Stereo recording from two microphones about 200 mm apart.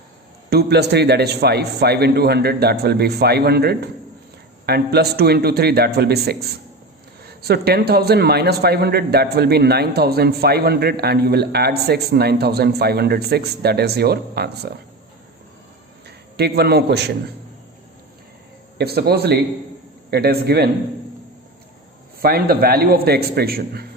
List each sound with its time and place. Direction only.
0.5 s a man's voice: 55° right (ahead or behind)
16.0 s a man's voice: 55° right (ahead or behind)
18.8 s a man's voice: 50° right (ahead or behind)
22.2 s a man's voice: 50° right (ahead or behind)